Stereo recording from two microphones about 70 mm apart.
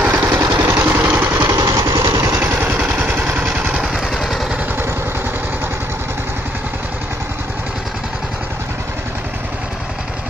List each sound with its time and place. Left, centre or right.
0.0 s vehicle: right
1.5 s vehicle: right
2.4 s vehicle: right
3.4 s vehicle: centre